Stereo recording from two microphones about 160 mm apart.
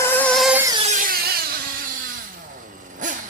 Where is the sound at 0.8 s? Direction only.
55° right (ahead or behind); by 1.4 s 70° right (ahead or behind).